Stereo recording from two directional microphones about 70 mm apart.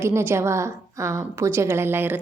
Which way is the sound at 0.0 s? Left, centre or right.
Right.